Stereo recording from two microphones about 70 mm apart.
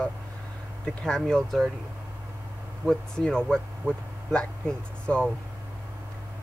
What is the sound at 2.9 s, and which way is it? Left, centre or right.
Speech, centre.